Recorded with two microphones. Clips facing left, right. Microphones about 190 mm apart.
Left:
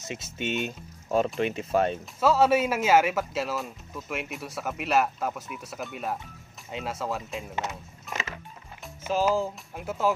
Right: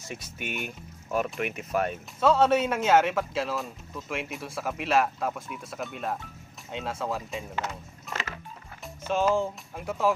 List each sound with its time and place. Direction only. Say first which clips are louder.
0.0 s speech: left 4 dB; 20° left (ahead or behind)
2.1 s speech: even; 5° left (ahead or behind)
7.5 s music: left 1 dB; 15° left (ahead or behind)
8.8 s speech: even; 5° left (ahead or behind)